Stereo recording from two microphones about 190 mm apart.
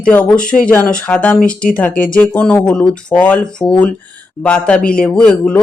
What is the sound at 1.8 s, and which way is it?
Speech, 45° left (ahead or behind).